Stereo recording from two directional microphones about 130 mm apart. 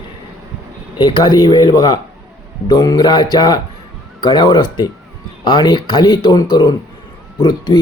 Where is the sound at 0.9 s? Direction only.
35° left (ahead or behind).